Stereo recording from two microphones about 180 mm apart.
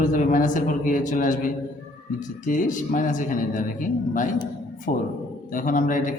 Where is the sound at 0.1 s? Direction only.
45° left (ahead or behind).